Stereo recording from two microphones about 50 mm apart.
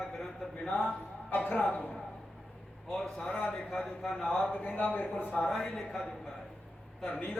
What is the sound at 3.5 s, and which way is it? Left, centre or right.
Speech, centre.